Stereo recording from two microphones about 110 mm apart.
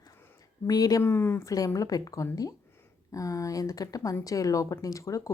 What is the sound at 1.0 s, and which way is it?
Speech, 20° left (ahead or behind).